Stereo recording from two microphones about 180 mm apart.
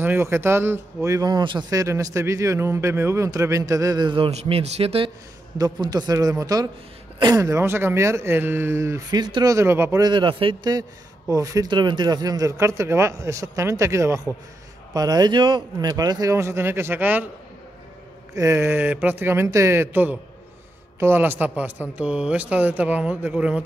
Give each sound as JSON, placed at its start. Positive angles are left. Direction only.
{"t": 0.0, "sound": "speech", "side_deg": -10}
{"t": 5.6, "sound": "speech", "side_deg": -20}
{"t": 18.3, "sound": "speech", "side_deg": -15}